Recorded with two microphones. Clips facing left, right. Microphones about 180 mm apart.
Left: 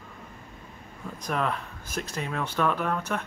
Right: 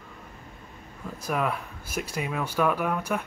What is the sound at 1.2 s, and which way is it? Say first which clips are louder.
Cutlery: right 1 dB; 10° right (ahead or behind).